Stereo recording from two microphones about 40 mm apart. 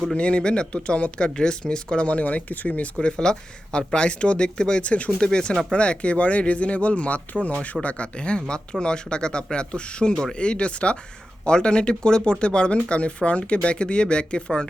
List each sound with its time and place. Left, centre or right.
0.1 s speech: left
3.0 s speech: left